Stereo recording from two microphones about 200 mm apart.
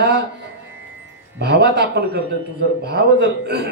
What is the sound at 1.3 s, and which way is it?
Speech, 55° right (ahead or behind).